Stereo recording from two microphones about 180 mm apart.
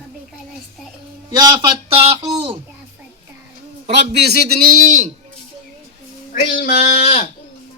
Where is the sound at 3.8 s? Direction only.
35° right (ahead or behind).